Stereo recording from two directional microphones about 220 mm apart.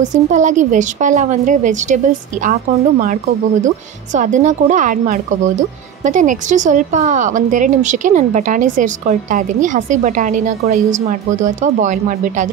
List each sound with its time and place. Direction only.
0.0 s speech: 35° right (ahead or behind)